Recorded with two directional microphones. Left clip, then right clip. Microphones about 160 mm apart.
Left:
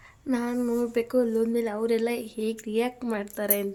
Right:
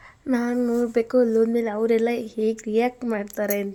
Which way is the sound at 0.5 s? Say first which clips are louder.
Right 4 dB; 15° right (ahead or behind).